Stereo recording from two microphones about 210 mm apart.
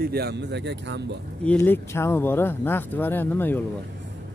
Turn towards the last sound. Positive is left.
turn(degrees=10)  # may be behind; listen again after turning